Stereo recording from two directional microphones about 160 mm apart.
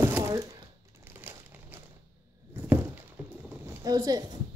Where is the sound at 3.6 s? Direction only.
25° right (ahead or behind).